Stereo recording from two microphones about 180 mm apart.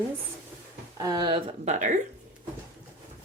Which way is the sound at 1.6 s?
45° right (ahead or behind).